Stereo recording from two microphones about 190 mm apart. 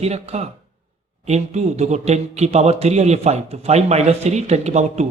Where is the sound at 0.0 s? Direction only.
35° right (ahead or behind).